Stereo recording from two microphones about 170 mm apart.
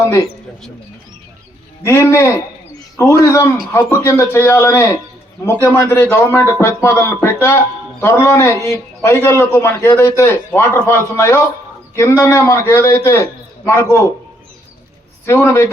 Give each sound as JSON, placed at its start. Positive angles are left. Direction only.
{"t": 0.0, "sound": "a man's voice", "side_deg": 20}
{"t": 1.8, "sound": "a man's voice", "side_deg": 15}
{"t": 15.3, "sound": "a man's voice", "side_deg": 15}